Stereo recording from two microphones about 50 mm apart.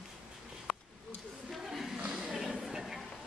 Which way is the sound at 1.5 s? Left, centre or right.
Centre.